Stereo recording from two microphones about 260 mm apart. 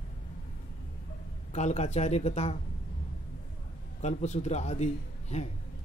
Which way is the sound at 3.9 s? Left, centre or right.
Left.